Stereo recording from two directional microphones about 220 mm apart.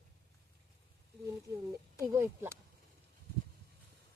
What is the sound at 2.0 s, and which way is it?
Speech, 10° right (ahead or behind).